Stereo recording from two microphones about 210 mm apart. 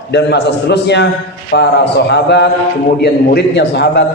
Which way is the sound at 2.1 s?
55° left (ahead or behind).